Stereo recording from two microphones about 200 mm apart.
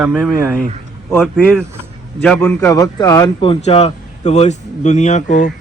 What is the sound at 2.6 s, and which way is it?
Speech, 20° left (ahead or behind).